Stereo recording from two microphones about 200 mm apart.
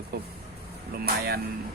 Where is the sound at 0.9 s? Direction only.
50° right (ahead or behind).